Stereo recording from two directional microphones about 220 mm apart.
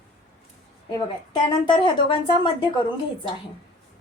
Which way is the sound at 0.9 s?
20° left (ahead or behind).